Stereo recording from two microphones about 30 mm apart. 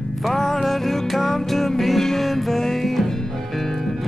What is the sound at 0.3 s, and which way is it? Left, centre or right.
Music, centre.